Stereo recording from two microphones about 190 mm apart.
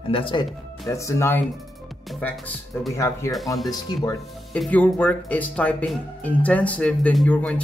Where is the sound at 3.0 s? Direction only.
15° left (ahead or behind).